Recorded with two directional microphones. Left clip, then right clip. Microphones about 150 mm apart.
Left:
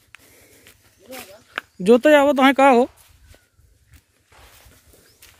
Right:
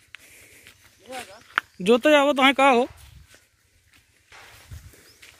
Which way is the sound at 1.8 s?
35° left (ahead or behind).